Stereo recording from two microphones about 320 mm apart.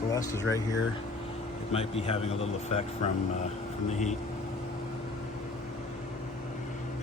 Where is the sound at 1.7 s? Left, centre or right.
Centre.